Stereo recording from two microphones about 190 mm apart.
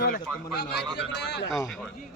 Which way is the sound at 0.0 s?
55° left (ahead or behind).